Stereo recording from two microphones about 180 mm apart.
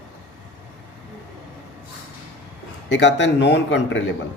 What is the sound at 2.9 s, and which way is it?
Speech, 80° left.